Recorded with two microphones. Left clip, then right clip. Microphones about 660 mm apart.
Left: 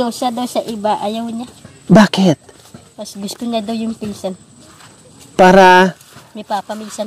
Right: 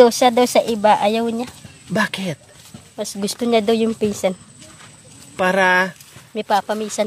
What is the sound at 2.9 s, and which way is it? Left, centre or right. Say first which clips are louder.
Speech: right 3 dB; right.